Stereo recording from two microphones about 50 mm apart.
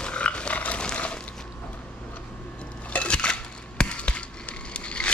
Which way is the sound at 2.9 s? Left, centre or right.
Left.